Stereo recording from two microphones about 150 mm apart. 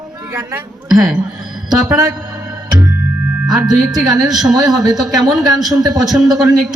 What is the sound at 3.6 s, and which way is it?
A woman's voice, 25° right (ahead or behind).